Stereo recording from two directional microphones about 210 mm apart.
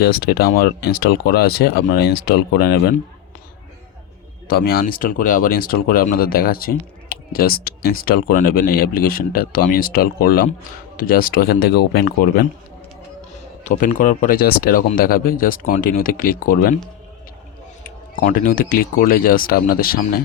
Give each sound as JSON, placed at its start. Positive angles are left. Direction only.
{"t": 0.0, "sound": "speech", "side_deg": 45}
{"t": 4.4, "sound": "speech", "side_deg": 45}
{"t": 13.7, "sound": "speech", "side_deg": 40}
{"t": 18.2, "sound": "speech", "side_deg": 40}